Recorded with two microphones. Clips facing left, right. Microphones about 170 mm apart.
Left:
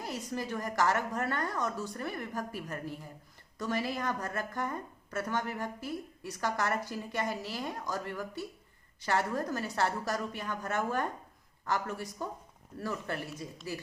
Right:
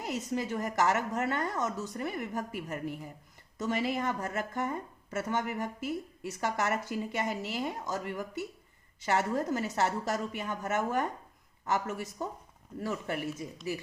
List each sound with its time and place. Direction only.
0.0 s a woman's voice: 20° right (ahead or behind)